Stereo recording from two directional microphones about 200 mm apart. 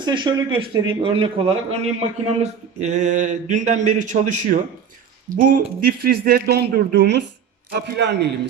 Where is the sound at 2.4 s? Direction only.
35° right (ahead or behind).